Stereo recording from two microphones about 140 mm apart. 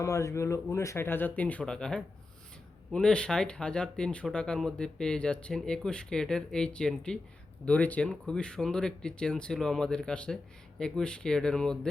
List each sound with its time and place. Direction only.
0.0 s speech: 20° left (ahead or behind); by 11.9 s 5° left (ahead or behind)